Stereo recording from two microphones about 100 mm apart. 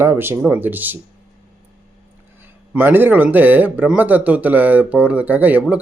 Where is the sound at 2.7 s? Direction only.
20° right (ahead or behind).